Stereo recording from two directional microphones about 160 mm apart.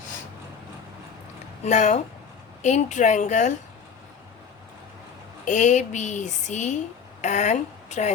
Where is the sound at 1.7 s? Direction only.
45° left (ahead or behind).